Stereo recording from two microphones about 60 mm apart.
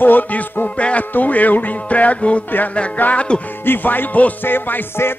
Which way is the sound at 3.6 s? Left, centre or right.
Left.